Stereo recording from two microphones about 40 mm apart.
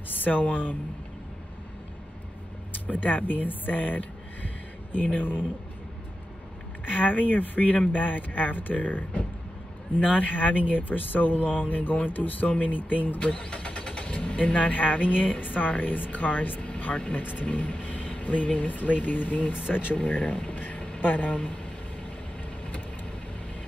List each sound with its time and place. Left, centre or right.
0.2 s speech: left
2.9 s speech: left
7.2 s speech: left
10.0 s speech: left
13.3 s speech: left
16.6 s speech: left
17.2 s speech: left
20.1 s speech: left